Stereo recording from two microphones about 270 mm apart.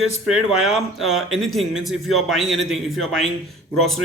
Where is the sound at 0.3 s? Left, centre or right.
Centre.